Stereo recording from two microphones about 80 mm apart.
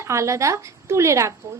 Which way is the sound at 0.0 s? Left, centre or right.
Right.